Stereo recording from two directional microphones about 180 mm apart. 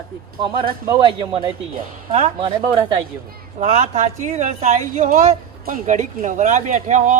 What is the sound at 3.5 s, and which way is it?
Speech, 35° right (ahead or behind).